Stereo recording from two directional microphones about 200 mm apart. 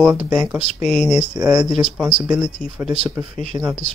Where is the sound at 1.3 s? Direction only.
20° right (ahead or behind).